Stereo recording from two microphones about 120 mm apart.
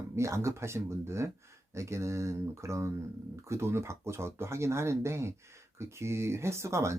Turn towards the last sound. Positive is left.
turn(degrees=-25)  # may be behind; listen again after turning